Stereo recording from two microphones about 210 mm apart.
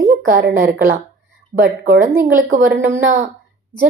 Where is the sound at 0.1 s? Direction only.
45° right (ahead or behind).